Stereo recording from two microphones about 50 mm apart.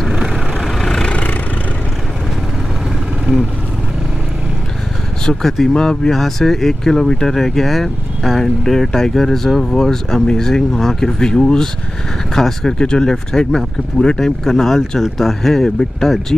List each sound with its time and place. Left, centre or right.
0.7 s vehicle: centre
1.0 s vehicle: left
5.2 s speech: centre